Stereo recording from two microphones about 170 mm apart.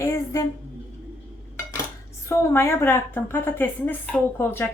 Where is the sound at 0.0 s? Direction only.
20° left (ahead or behind).